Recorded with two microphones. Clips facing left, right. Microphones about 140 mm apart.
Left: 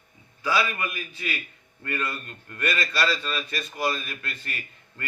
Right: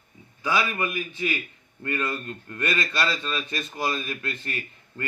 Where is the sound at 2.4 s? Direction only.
25° right (ahead or behind).